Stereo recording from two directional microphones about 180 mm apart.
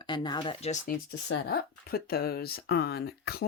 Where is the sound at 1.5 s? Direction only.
60° left (ahead or behind).